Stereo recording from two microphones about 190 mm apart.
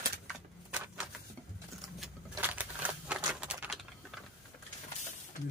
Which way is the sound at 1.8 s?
Centre (ahead or behind).